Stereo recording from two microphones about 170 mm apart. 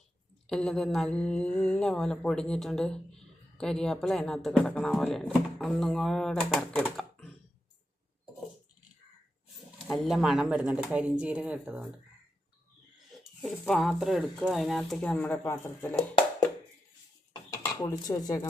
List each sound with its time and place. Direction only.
0.4 s mantra: 5° left (ahead or behind)
9.8 s mantra: centre (ahead or behind)
11.2 s speech: 5° right (ahead or behind)
13.4 s mantra: centre (ahead or behind)
17.5 s speech: 20° left (ahead or behind)